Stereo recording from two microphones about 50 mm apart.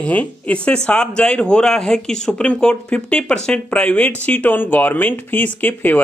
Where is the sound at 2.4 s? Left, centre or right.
Left.